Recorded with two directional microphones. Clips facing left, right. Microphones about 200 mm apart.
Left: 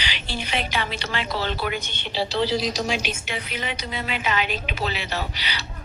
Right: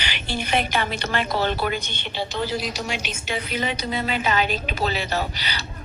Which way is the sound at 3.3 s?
40° right (ahead or behind).